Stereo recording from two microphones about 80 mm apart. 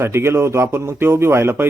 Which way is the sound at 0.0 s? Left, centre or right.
Right.